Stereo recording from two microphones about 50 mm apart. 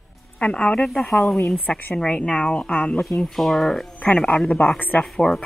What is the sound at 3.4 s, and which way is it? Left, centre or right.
Speech, centre.